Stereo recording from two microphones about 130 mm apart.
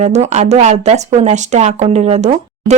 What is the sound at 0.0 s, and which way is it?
Speech, 60° right (ahead or behind).